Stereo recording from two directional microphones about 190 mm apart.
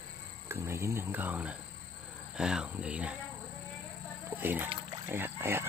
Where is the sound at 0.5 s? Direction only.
15° right (ahead or behind).